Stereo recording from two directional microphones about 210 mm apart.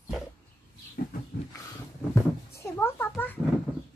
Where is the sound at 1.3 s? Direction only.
50° left (ahead or behind).